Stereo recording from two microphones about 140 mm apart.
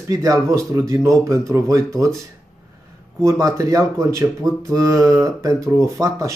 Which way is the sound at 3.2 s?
20° right (ahead or behind).